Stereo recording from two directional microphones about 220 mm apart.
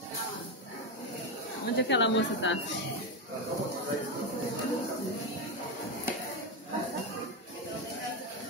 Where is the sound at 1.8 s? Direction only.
55° left (ahead or behind).